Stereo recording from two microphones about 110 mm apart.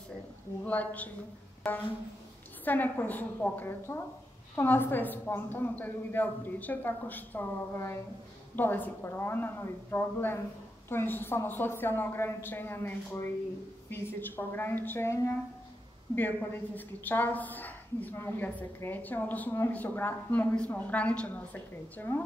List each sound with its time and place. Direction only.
0.7 s a woman's voice: 15° left (ahead or behind)
2.6 s a woman's voice: 15° left (ahead or behind)